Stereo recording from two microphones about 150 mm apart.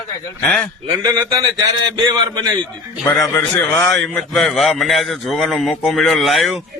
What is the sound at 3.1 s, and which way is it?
Speech, 20° left (ahead or behind).